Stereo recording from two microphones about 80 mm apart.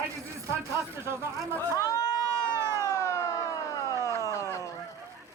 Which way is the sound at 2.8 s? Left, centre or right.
Left.